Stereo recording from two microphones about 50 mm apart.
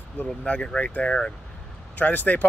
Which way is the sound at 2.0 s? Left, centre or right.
Left.